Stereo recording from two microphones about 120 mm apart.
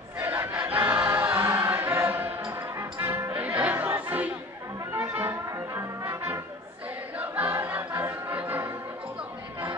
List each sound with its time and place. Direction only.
0.2 s choir: 15° right (ahead or behind)
4.9 s music: 15° right (ahead or behind)
7.2 s choir: 15° right (ahead or behind)